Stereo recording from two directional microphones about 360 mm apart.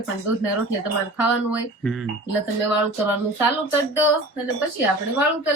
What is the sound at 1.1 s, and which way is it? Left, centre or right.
Speech, centre.